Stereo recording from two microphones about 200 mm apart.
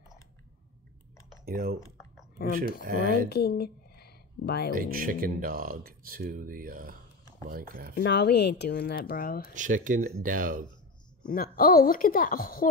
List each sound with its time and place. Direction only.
1.4 s speech: 50° right (ahead or behind)
2.8 s speech: 45° right (ahead or behind)
3.3 s a sound: 55° left (ahead or behind)
4.7 s speech: 45° right (ahead or behind)
7.9 s speech: 55° left (ahead or behind)
9.5 s speech: 40° right (ahead or behind)
11.2 s speech: 45° left (ahead or behind)